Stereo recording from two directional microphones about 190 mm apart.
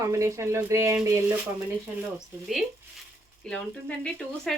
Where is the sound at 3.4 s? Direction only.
5° left (ahead or behind).